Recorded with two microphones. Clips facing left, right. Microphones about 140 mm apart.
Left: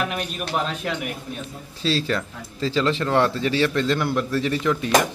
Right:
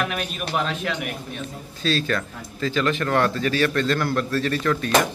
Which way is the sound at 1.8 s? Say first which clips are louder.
Even; 25° left (ahead or behind).